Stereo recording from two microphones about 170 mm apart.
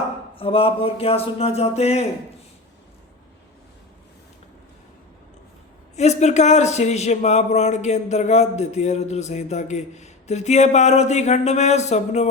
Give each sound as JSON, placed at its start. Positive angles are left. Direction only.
{"t": 0.3, "sound": "speech", "side_deg": 35}
{"t": 6.0, "sound": "speech", "side_deg": 40}